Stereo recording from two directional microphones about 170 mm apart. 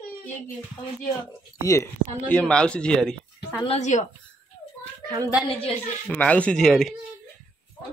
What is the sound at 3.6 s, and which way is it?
Speech, 40° left (ahead or behind).